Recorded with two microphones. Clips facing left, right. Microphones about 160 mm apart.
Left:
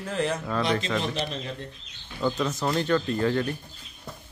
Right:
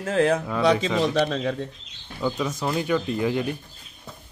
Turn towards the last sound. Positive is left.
turn(degrees=-15)  # may be behind; listen again after turning